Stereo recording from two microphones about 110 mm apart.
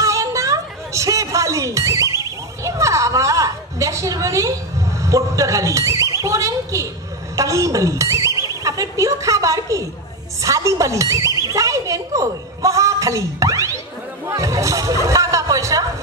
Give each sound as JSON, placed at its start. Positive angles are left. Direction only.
{"t": 0.0, "sound": "music", "side_deg": -30}
{"t": 6.2, "sound": "a woman's voice", "side_deg": -30}